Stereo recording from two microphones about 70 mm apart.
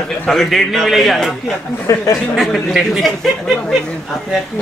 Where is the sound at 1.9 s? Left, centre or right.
Left.